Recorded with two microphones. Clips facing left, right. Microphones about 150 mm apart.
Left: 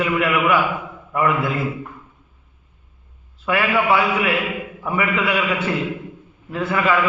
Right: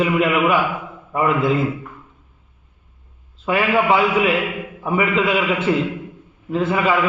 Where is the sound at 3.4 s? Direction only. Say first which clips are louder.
Right 2 dB; 20° right (ahead or behind).